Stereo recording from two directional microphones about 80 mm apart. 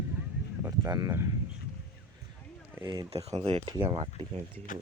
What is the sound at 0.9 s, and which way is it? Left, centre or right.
Speech, right.